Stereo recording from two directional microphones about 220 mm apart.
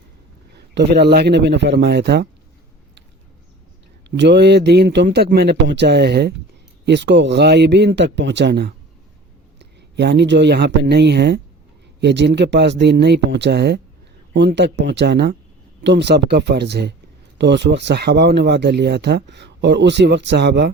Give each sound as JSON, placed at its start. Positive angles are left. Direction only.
{"t": 0.5, "sound": "speech", "side_deg": -50}
{"t": 4.2, "sound": "speech", "side_deg": -50}